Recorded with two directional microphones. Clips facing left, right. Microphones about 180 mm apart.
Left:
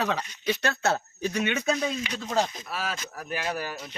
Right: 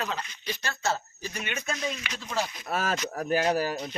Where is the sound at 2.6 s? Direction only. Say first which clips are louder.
Right 4 dB; 50° right (ahead or behind).